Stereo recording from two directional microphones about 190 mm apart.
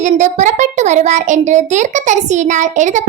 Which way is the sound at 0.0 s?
40° right (ahead or behind).